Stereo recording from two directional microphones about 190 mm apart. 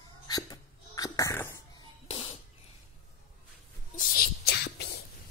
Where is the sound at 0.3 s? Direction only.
20° left (ahead or behind).